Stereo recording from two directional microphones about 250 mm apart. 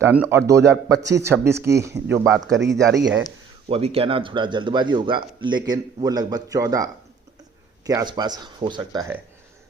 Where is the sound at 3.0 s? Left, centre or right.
Centre.